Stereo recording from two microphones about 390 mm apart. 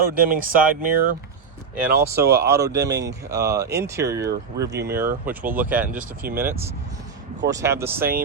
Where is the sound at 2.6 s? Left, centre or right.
Right.